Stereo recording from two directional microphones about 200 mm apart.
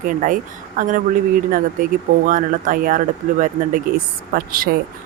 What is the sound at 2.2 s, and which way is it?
Speech, 45° right (ahead or behind).